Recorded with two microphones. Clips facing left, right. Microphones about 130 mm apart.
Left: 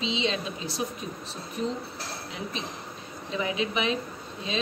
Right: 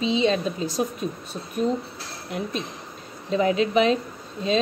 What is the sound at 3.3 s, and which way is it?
Speech, 40° right (ahead or behind).